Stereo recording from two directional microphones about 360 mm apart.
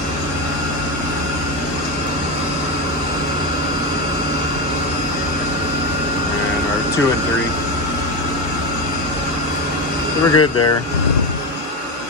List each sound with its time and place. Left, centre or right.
10.3 s speech: left